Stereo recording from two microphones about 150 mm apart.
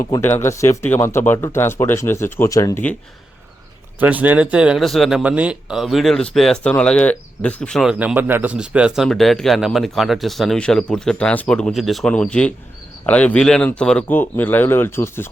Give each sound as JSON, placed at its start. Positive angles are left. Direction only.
{"t": 0.0, "sound": "speech", "side_deg": 15}
{"t": 4.0, "sound": "speech", "side_deg": -10}
{"t": 7.9, "sound": "speech", "side_deg": -10}